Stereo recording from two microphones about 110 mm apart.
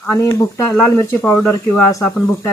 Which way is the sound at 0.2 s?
30° left (ahead or behind).